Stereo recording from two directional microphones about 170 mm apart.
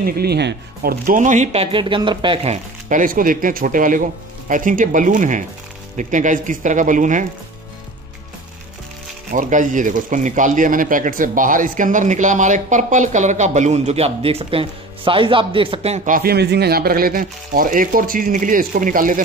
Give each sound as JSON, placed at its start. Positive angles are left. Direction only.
{"t": 0.0, "sound": "speech", "side_deg": -70}
{"t": 1.0, "sound": "speech", "side_deg": -50}
{"t": 9.3, "sound": "speech", "side_deg": -50}
{"t": 16.1, "sound": "speech", "side_deg": -60}